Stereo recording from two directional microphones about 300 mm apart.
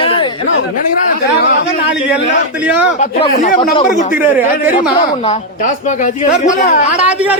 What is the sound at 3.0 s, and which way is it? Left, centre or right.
Speech, left.